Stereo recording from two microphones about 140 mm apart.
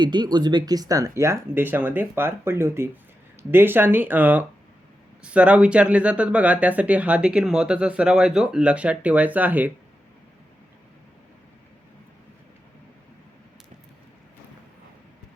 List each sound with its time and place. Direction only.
0.0 s speech: 30° right (ahead or behind); by 9.7 s 10° right (ahead or behind)